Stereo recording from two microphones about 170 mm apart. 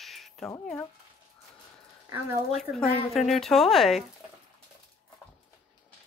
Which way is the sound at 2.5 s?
Centre (ahead or behind).